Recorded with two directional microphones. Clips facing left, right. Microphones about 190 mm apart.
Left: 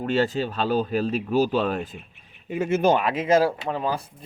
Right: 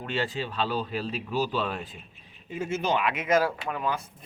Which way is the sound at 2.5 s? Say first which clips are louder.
Left 7 dB; 60° left (ahead or behind).